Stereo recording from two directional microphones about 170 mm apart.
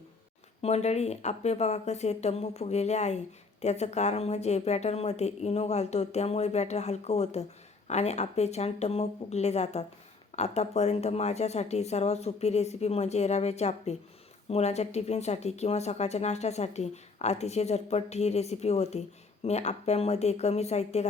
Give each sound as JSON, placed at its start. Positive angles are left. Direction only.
{"t": 0.6, "sound": "speech", "side_deg": 40}